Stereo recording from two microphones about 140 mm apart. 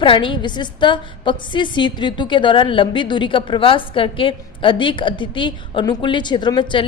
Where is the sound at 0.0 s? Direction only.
35° left (ahead or behind).